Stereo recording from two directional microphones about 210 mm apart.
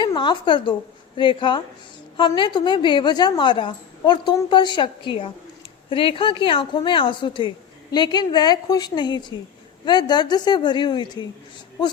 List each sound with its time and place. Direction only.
0.0 s a woman's voice: 20° left (ahead or behind)